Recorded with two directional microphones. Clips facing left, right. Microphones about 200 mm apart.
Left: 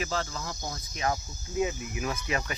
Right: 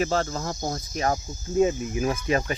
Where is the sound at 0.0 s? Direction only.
40° right (ahead or behind).